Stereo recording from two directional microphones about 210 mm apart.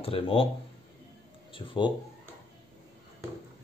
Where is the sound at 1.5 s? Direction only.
25° left (ahead or behind).